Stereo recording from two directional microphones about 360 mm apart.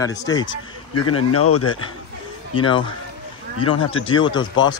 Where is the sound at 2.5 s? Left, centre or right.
Centre.